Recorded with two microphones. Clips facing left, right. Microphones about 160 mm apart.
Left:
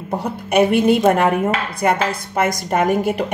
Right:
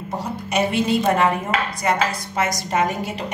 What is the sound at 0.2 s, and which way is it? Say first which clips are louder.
A woman's voice: left 6 dB; 55° left (ahead or behind).